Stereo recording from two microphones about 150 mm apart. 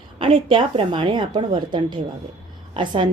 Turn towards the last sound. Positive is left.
turn(degrees=-35)  # may be behind; listen again after turning